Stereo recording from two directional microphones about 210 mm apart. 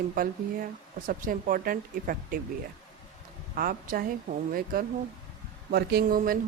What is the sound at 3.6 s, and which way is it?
Speech, 45° right (ahead or behind).